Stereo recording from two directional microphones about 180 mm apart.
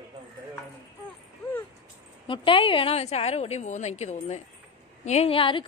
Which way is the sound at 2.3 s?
30° left (ahead or behind).